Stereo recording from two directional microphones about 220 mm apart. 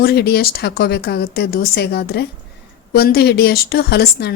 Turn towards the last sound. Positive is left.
turn(degrees=45)  # may be behind; listen again after turning